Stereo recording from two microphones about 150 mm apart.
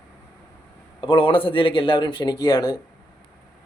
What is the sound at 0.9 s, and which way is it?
A man's voice, 35° left (ahead or behind).